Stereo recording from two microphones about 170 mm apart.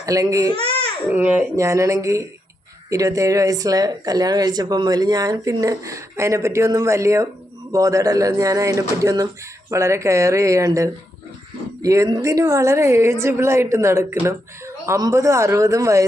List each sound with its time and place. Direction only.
0.0 s a woman's voice: 20° right (ahead or behind)